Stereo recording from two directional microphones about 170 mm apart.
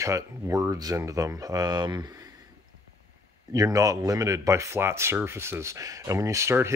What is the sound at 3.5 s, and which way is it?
Speech, 20° right (ahead or behind).